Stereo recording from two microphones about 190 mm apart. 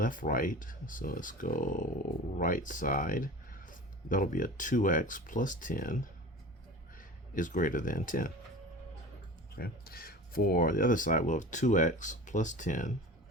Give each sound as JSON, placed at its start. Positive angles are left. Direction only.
{"t": 0.0, "sound": "speech", "side_deg": 45}
{"t": 7.3, "sound": "speech", "side_deg": 45}
{"t": 9.6, "sound": "speech", "side_deg": 50}